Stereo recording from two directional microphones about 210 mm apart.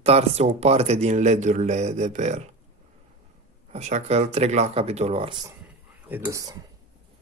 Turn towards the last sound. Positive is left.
turn(degrees=-15)  # may be behind; listen again after turning